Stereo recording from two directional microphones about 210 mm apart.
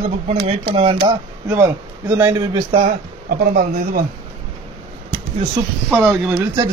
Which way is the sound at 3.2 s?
45° right (ahead or behind).